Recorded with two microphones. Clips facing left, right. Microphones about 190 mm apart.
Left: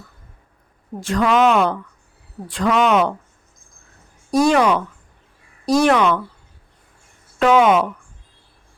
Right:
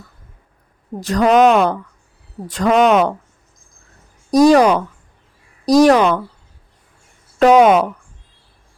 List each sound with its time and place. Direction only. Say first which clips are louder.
0.9 s a woman's voice: right 4 dB; 40° right (ahead or behind)
4.3 s a woman's voice: right 5 dB; 40° right (ahead or behind)
7.3 s a woman's voice: right 4 dB; 40° right (ahead or behind)